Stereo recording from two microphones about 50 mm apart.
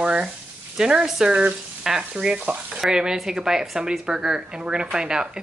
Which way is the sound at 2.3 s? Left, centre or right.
Right.